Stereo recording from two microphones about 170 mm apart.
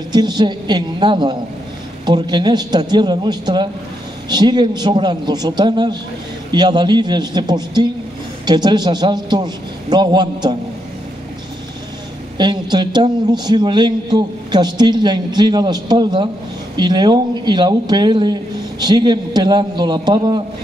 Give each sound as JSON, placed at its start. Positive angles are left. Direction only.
{"t": 0.1, "sound": "a man's voice", "side_deg": -25}
{"t": 12.4, "sound": "a man's voice", "side_deg": -25}